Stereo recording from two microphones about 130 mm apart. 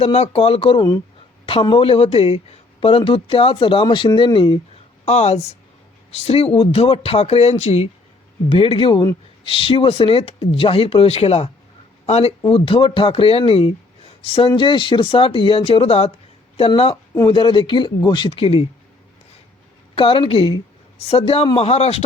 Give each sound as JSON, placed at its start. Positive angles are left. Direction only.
{"t": 0.0, "sound": "speech", "side_deg": 50}
{"t": 5.0, "sound": "a woman's voice", "side_deg": 55}
{"t": 8.4, "sound": "speech", "side_deg": 45}
{"t": 12.4, "sound": "speech", "side_deg": 45}
{"t": 20.0, "sound": "speech", "side_deg": 45}